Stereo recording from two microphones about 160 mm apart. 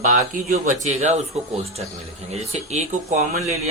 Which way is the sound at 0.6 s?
50° right (ahead or behind).